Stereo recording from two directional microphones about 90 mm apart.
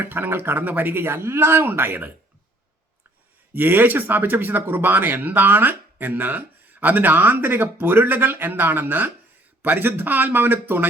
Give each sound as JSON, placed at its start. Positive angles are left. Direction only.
{"t": 0.0, "sound": "speech", "side_deg": -25}
{"t": 3.5, "sound": "speech", "side_deg": -20}